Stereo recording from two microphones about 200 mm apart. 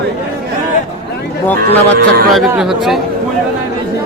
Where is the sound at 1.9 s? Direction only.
50° right (ahead or behind).